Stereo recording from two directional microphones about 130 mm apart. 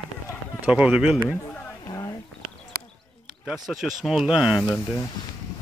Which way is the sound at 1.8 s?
25° left (ahead or behind).